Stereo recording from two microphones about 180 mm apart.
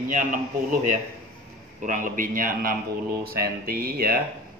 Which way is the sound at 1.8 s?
45° right (ahead or behind).